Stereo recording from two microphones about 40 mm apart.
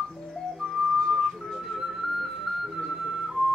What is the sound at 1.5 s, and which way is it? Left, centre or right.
Music, centre.